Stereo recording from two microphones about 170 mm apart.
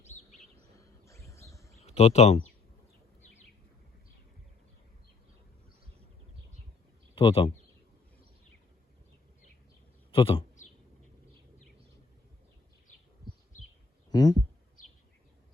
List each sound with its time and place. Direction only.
0.0 s bird: 40° left (ahead or behind)
0.8 s a sound: 20° left (ahead or behind)
1.8 s speech: 40° left (ahead or behind)
7.2 s speech: 30° left (ahead or behind)
10.1 s a man's voice: 30° left (ahead or behind)
14.1 s speech: 25° left (ahead or behind)